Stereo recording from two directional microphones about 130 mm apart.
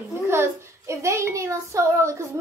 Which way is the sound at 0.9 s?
20° right (ahead or behind).